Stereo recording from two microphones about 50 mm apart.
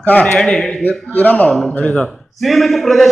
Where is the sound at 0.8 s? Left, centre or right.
Left.